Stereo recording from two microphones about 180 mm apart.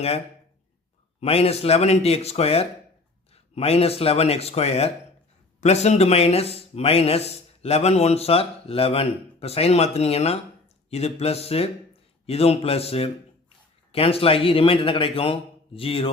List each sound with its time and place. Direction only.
1.2 s speech: 35° left (ahead or behind)